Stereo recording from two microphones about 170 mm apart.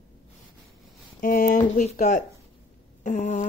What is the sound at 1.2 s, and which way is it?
Speech, 55° left (ahead or behind).